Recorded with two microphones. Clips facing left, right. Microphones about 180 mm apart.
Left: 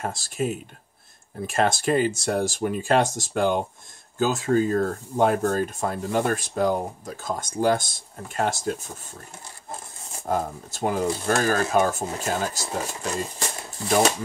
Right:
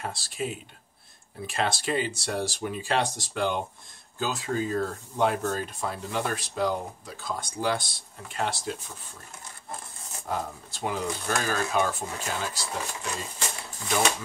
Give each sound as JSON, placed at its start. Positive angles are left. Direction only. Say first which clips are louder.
{"t": 0.0, "sound": "speech", "louder": "left 5 dB", "side_deg": 45}
{"t": 10.2, "sound": "speech", "louder": "left 6 dB", "side_deg": 45}